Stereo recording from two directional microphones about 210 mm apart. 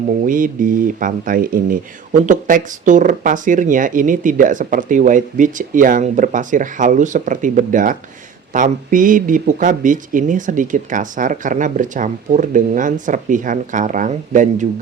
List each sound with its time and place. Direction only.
0.3 s speech: 40° right (ahead or behind)